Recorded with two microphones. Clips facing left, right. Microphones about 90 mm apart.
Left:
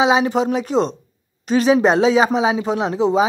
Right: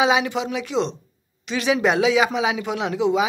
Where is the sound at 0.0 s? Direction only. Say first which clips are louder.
Left 4 dB; 35° left (ahead or behind).